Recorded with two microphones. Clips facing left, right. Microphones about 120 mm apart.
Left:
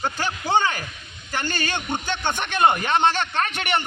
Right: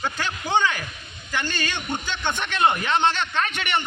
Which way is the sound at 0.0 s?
40° left (ahead or behind).